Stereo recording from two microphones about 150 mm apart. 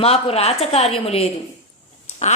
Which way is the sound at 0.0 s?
40° left (ahead or behind).